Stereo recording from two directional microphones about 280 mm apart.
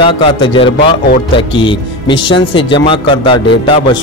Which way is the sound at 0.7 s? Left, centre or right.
Left.